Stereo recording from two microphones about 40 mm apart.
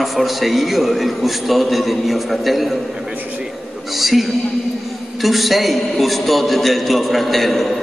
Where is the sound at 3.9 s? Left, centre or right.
Centre.